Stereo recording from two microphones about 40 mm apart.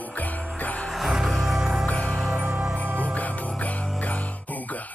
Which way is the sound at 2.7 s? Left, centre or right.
Right.